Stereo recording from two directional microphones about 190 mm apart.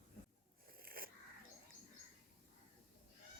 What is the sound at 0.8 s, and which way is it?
Wheeze, 50° right (ahead or behind).